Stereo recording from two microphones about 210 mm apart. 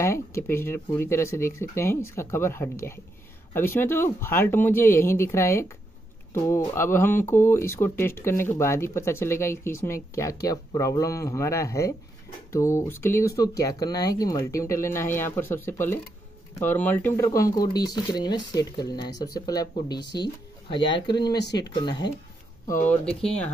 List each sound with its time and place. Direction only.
0.0 s speech: 10° left (ahead or behind)
22.8 s speech: 5° left (ahead or behind)